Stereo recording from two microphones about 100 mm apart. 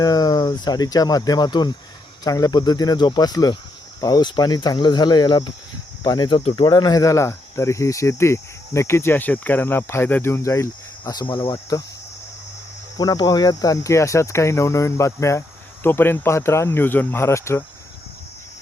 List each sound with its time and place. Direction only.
0.0 s speech: 40° left (ahead or behind)
11.1 s speech: 45° left (ahead or behind)
13.0 s speech: 45° left (ahead or behind); by 17.6 s 30° left (ahead or behind)